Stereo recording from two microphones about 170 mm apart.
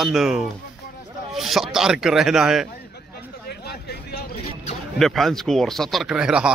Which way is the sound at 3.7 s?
70° left (ahead or behind).